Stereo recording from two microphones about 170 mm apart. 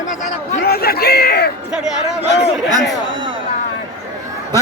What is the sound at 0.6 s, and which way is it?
Speech, 65° left (ahead or behind).